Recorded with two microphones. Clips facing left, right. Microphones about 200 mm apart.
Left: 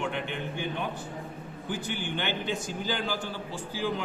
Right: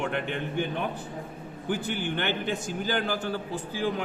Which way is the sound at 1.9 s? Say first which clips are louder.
Right 3 dB; 55° right (ahead or behind).